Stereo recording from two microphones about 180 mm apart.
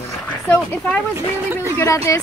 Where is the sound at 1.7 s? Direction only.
15° left (ahead or behind).